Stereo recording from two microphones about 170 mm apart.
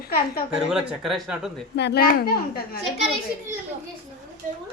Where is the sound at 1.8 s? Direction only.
80° left.